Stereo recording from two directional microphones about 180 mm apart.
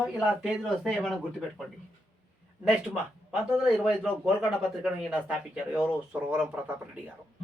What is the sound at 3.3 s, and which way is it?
A man's voice, 5° right (ahead or behind).